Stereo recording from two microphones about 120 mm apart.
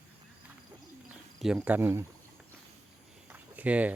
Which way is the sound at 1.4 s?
5° right (ahead or behind).